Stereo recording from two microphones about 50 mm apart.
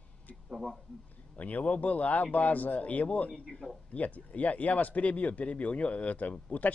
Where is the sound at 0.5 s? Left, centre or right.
Centre.